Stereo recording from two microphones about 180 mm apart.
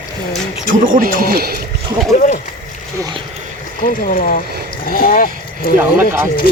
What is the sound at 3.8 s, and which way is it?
Speech, 50° left (ahead or behind).